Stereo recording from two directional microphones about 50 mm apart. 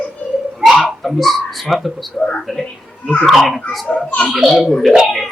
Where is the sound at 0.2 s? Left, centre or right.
Left.